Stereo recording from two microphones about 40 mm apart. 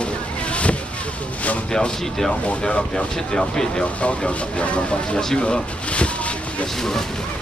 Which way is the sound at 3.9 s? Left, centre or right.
Left.